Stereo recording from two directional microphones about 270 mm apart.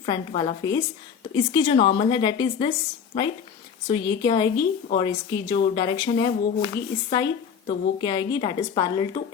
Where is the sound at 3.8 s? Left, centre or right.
Centre.